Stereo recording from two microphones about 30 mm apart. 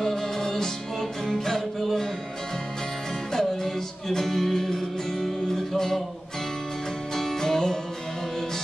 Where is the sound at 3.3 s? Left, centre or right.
Centre.